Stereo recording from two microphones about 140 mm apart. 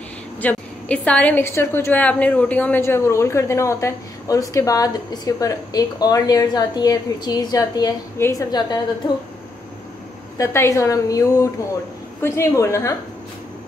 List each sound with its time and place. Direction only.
0.4 s a woman's voice: 10° left (ahead or behind); by 8.7 s 30° left (ahead or behind)
10.3 s a woman's voice: 20° left (ahead or behind)